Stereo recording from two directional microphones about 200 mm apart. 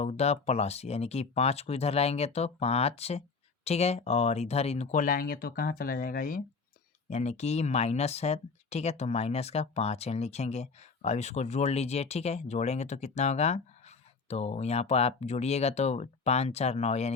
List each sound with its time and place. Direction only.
0.0 s speech: 30° left (ahead or behind)
7.1 s speech: 35° left (ahead or behind)